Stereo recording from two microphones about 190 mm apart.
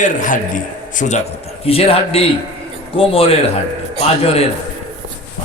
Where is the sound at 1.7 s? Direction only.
30° left (ahead or behind).